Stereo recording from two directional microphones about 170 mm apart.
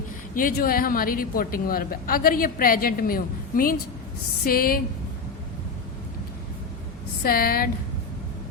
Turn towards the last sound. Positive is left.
turn(degrees=60)  # may be behind; listen again after turning